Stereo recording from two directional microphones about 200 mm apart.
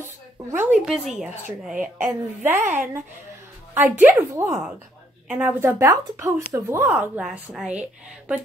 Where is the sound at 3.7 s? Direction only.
10° right (ahead or behind).